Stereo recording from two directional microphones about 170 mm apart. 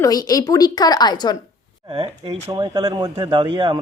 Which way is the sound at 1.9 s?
35° right (ahead or behind).